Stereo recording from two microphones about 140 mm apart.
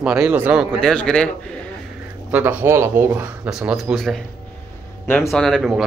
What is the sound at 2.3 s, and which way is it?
Speech, 15° right (ahead or behind).